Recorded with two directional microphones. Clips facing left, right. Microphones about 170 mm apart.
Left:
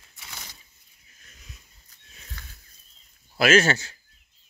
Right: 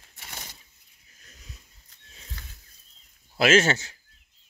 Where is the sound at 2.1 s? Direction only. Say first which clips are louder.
Right 1 dB; 25° right (ahead or behind).